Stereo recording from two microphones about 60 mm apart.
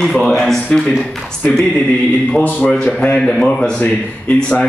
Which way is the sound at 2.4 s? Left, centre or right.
Left.